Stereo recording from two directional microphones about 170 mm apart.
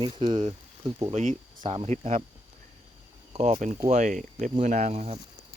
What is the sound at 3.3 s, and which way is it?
Speech, 40° right (ahead or behind).